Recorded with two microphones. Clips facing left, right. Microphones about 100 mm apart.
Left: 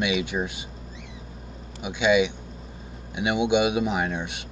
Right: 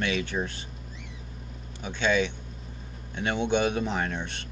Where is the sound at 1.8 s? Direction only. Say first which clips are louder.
Left 5 dB; 10° left (ahead or behind).